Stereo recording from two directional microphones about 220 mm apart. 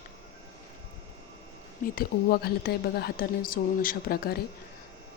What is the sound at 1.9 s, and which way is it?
Speech, 45° left (ahead or behind).